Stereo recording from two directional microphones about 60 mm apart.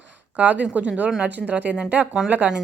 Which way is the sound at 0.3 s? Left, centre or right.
Right.